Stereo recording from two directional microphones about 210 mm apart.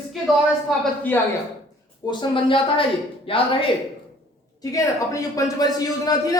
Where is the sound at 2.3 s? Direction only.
25° left (ahead or behind).